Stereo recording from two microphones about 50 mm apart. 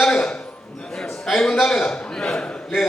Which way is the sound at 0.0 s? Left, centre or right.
Centre.